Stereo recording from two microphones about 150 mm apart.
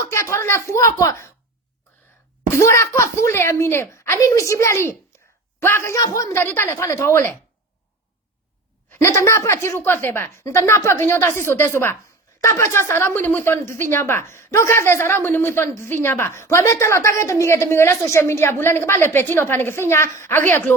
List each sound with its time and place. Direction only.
0.1 s speech: 20° left (ahead or behind)
2.5 s a woman's voice: 20° left (ahead or behind)
8.9 s a woman's voice: 15° left (ahead or behind)